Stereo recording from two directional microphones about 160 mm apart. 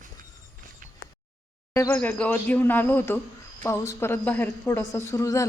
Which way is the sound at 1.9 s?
5° left (ahead or behind).